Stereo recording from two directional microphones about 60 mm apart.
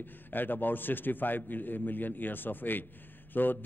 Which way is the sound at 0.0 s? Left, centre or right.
Left.